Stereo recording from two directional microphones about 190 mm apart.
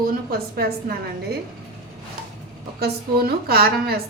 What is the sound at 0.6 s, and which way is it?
Speech, 55° right (ahead or behind).